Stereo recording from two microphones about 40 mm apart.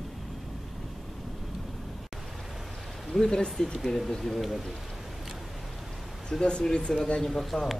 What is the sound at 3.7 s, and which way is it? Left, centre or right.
Speech, centre.